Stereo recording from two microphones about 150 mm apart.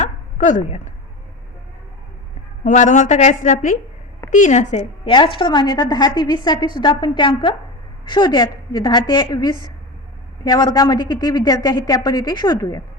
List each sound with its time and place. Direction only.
0.0 s a sound: 55° left (ahead or behind)
2.6 s a woman's voice: 55° left (ahead or behind)
5.1 s a woman's voice: 35° left (ahead or behind)